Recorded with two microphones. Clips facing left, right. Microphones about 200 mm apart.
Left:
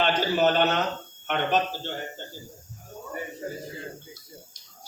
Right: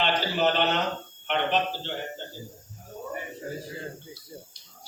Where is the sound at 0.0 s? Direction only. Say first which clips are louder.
Left 3 dB; 45° left (ahead or behind).